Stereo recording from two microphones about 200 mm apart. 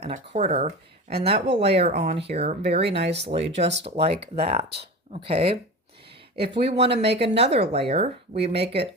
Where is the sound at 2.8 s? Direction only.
60° right (ahead or behind).